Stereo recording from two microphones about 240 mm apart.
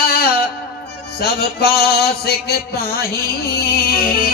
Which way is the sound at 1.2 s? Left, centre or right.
Left.